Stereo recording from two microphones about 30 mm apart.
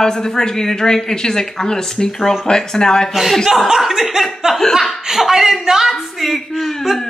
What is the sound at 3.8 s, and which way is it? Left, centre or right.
Speech, centre.